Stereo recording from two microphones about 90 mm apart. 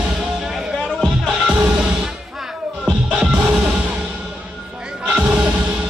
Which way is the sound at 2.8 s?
5° right (ahead or behind).